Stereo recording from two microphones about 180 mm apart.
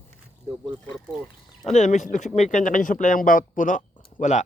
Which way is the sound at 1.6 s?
40° left (ahead or behind).